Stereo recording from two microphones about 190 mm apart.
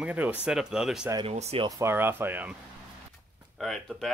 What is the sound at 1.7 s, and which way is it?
Speech, 15° right (ahead or behind).